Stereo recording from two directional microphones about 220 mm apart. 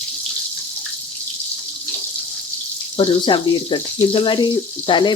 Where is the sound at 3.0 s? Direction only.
20° left (ahead or behind).